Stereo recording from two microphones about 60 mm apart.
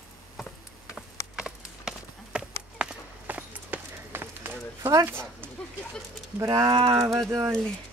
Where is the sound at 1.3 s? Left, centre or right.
Centre.